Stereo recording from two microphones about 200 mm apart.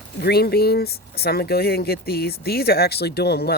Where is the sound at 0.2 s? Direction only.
50° left (ahead or behind).